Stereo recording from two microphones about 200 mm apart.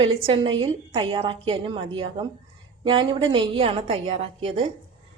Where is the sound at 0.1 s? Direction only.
25° right (ahead or behind).